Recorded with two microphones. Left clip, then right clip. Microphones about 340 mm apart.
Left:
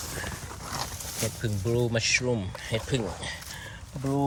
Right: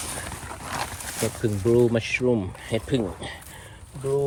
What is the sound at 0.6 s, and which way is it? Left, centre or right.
Wild animals, right.